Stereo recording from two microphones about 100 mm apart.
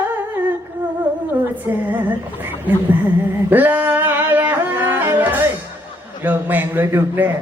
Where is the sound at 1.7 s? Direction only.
20° right (ahead or behind).